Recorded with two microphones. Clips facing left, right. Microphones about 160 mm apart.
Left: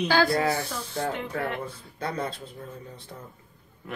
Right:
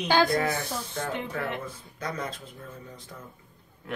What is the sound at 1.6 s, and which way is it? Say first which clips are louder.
Speech: left 2 dB; 30° left (ahead or behind).